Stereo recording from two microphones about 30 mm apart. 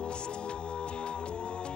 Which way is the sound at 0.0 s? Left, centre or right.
Left.